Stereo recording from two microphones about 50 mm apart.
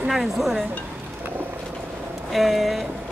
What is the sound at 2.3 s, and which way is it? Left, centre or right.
Speech, centre.